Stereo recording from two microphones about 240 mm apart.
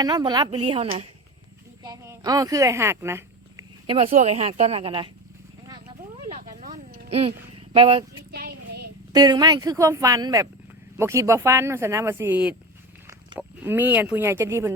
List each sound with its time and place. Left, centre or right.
0.0 s speech: centre
1.8 s a sound: centre
3.9 s speech: right
6.6 s a sound: right
7.1 s speech: right
8.3 s child singing: right
9.1 s speech: centre